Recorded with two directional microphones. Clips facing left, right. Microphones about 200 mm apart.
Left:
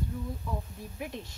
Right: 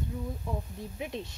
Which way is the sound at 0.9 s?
20° right (ahead or behind).